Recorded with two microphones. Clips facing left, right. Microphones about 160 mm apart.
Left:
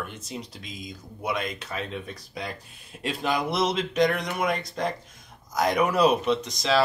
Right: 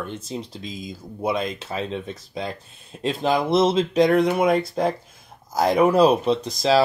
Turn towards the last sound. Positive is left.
turn(degrees=-35)  # may be behind; listen again after turning